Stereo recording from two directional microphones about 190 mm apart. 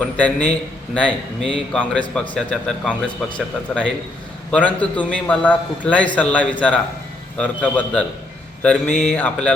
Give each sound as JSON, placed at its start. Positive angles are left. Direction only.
{"t": 0.0, "sound": "a man's voice", "side_deg": 10}